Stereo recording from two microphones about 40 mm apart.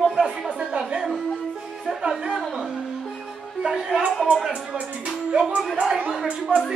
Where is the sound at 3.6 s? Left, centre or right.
Centre.